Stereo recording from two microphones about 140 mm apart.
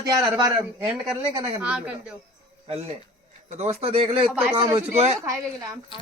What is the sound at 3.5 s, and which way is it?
Speech, 55° right (ahead or behind).